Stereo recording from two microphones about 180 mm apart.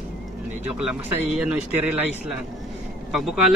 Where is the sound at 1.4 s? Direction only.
10° right (ahead or behind).